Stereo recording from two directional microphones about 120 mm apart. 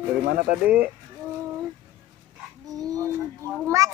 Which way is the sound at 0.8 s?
15° right (ahead or behind).